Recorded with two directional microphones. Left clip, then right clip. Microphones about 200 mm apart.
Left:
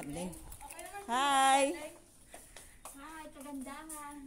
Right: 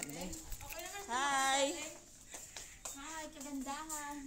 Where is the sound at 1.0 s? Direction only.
50° left (ahead or behind).